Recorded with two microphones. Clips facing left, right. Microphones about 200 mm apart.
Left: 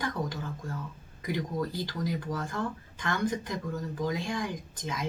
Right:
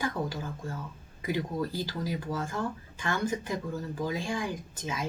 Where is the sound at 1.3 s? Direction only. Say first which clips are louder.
Right 1 dB; 10° right (ahead or behind).